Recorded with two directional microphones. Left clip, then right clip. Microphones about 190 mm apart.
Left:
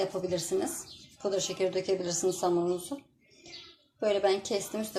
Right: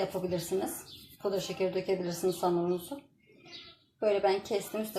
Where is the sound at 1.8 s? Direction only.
20° left (ahead or behind).